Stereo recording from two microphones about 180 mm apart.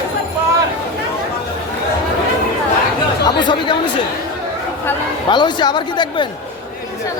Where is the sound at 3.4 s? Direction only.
25° left (ahead or behind).